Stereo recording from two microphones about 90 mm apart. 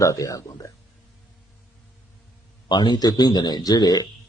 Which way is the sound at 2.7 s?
50° left (ahead or behind).